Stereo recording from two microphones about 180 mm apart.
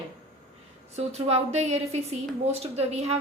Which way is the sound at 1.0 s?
35° right (ahead or behind).